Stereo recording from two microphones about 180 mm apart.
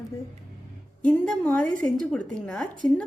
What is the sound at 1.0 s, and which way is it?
A woman's voice, 5° left (ahead or behind).